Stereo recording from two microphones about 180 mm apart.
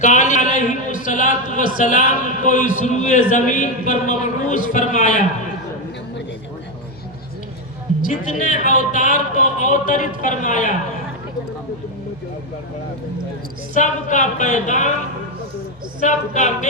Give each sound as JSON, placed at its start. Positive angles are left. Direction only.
{"t": 0.0, "sound": "a man's voice", "side_deg": 45}
{"t": 8.0, "sound": "a man's voice", "side_deg": 45}
{"t": 13.7, "sound": "a man's voice", "side_deg": 45}
{"t": 16.0, "sound": "a man's voice", "side_deg": 45}